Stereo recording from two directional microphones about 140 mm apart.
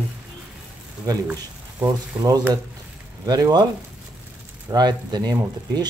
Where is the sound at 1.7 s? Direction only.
25° right (ahead or behind).